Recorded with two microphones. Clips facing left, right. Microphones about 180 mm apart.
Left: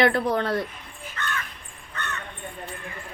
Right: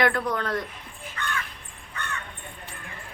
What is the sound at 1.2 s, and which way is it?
Crow, 10° right (ahead or behind).